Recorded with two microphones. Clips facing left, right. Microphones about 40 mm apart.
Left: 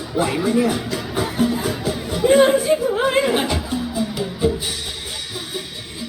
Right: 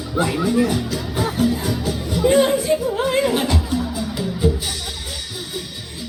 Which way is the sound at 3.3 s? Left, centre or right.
Centre.